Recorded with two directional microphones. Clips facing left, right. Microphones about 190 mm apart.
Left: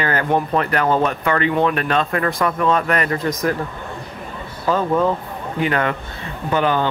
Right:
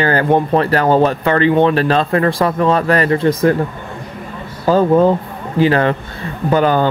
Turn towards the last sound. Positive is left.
turn(degrees=-40)  # may be behind; listen again after turning